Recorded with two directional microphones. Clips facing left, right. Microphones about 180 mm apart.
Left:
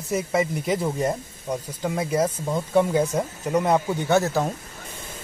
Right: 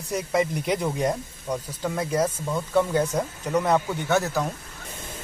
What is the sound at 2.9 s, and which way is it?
Speech, 10° left (ahead or behind).